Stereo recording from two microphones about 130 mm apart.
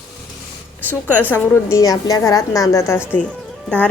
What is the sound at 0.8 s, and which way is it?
Speech, 15° right (ahead or behind).